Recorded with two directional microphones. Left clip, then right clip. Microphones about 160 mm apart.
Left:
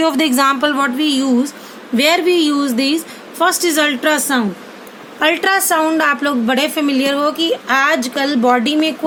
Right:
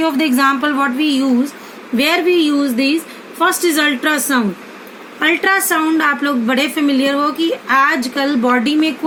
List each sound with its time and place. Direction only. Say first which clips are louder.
0.0 s a woman's voice: left 1 dB; 35° left (ahead or behind); by 4.4 s 15° left (ahead or behind)
5.2 s a woman's voice: even; 30° left (ahead or behind)